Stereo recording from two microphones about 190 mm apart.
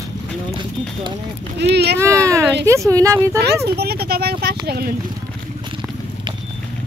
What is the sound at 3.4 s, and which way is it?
Speech, 60° right (ahead or behind).